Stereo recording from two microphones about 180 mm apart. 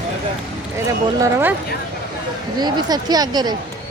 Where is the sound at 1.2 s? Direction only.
15° right (ahead or behind).